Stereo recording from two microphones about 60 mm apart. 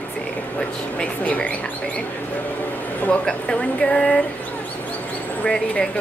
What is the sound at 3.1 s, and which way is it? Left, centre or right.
Speech, centre.